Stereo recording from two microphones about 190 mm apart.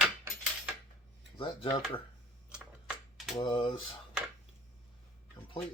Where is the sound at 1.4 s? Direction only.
25° left (ahead or behind).